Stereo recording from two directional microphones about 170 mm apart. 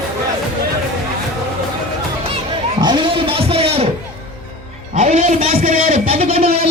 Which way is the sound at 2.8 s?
25° right (ahead or behind).